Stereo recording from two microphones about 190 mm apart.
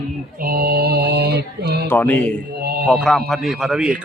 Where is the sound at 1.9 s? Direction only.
10° left (ahead or behind).